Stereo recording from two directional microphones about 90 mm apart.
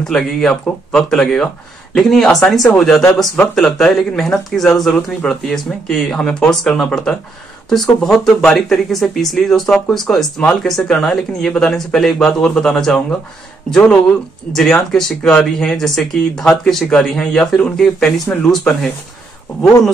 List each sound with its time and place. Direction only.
0.0 s speech: 5° left (ahead or behind)